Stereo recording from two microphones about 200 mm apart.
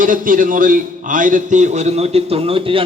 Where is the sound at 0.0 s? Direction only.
40° right (ahead or behind).